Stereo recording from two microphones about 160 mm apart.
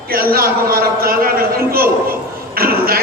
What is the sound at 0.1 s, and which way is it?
A man's voice, 65° right (ahead or behind).